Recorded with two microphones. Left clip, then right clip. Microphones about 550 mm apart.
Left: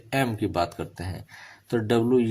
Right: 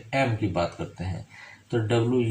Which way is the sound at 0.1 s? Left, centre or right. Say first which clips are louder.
Even; left.